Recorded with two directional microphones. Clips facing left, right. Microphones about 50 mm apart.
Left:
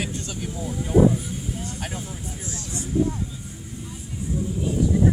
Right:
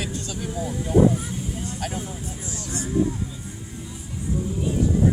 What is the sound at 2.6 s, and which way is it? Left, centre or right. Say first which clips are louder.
Speech: right 5 dB; right.